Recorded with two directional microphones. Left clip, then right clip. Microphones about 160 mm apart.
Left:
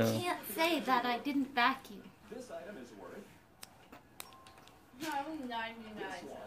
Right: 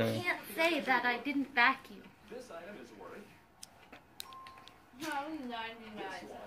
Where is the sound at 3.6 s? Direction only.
55° left (ahead or behind).